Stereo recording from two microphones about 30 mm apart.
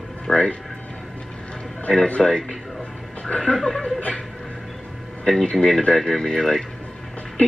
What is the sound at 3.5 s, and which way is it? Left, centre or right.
Speech, centre.